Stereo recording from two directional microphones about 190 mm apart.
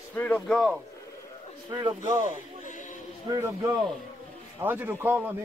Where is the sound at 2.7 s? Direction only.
40° left (ahead or behind).